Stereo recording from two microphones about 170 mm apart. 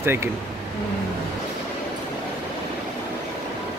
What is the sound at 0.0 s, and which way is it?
Speech, 15° right (ahead or behind).